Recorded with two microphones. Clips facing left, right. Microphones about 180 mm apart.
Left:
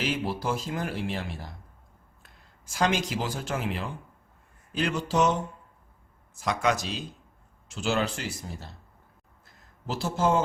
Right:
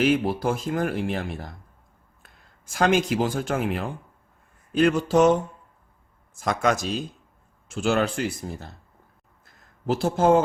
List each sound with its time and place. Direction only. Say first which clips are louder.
0.0 s speech: right 8 dB; 55° right (ahead or behind)
9.8 s speech: right 6 dB; 55° right (ahead or behind)